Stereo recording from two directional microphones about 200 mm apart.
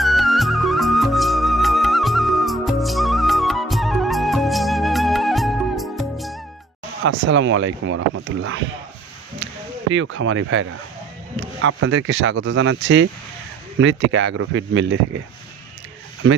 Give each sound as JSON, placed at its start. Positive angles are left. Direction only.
{"t": 0.0, "sound": "music", "side_deg": 0}
{"t": 7.0, "sound": "speech", "side_deg": -70}
{"t": 9.9, "sound": "speech", "side_deg": -70}